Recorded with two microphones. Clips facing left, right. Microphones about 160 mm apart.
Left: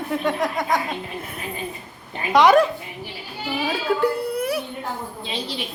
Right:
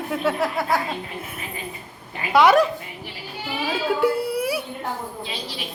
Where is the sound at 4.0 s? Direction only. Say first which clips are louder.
Right 1 dB; 5° right (ahead or behind).